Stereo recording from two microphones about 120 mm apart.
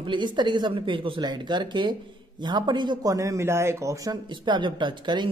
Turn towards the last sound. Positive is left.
turn(degrees=-40)  # may be behind; listen again after turning